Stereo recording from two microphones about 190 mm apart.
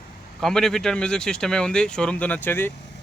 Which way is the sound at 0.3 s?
Centre (ahead or behind).